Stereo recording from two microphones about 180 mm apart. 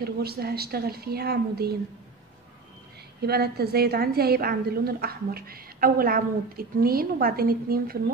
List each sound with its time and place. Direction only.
0.0 s a woman's voice: 60° right (ahead or behind)
3.2 s a woman's voice: 60° right (ahead or behind)